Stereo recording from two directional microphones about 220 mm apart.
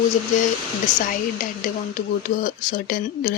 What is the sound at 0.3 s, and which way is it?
Speech, 35° left (ahead or behind).